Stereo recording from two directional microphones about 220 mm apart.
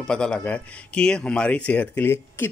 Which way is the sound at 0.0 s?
5° left (ahead or behind).